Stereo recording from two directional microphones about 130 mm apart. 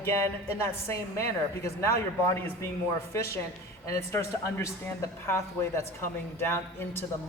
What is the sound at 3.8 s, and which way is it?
A woman's voice, 20° left (ahead or behind).